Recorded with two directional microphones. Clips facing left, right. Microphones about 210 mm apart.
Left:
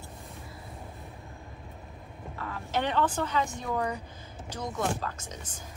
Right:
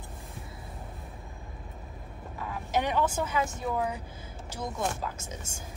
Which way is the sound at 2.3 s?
10° right (ahead or behind).